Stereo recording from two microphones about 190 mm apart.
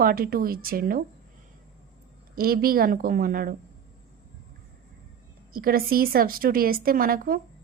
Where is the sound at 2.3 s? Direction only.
50° right (ahead or behind).